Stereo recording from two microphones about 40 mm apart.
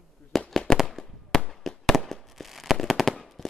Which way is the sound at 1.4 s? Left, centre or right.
Centre.